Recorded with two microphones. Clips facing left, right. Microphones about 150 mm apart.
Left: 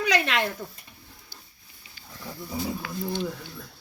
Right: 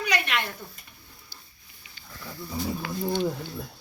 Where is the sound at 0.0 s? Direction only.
90° left.